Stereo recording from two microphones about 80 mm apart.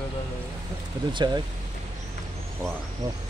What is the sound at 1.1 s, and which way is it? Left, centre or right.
Speech, right.